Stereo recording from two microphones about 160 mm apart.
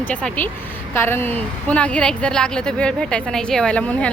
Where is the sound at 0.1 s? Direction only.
5° left (ahead or behind).